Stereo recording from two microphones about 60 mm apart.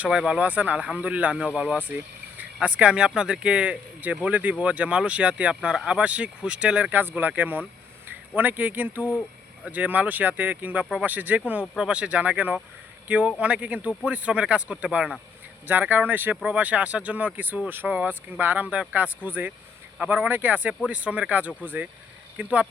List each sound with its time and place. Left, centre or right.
0.1 s speech: centre
0.4 s speech: right
7.0 s speech: right
15.6 s speech: right